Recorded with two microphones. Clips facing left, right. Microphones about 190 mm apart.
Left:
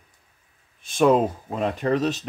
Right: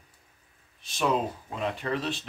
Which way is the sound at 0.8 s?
50° left (ahead or behind).